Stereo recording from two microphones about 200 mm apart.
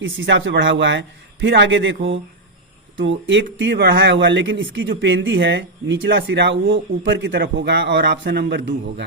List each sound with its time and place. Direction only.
0.0 s a man's voice: 70° right (ahead or behind)